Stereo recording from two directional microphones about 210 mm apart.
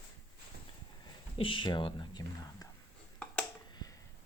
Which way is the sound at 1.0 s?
25° left (ahead or behind).